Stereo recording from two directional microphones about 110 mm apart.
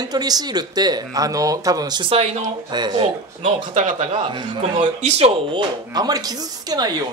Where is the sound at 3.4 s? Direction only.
90° right.